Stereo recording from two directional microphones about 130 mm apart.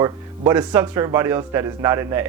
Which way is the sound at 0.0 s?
20° right (ahead or behind).